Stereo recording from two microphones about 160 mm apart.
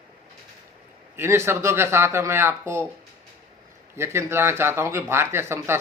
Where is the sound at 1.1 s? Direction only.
15° right (ahead or behind).